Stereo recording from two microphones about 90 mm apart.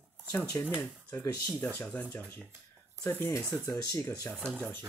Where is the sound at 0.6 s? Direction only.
30° left (ahead or behind).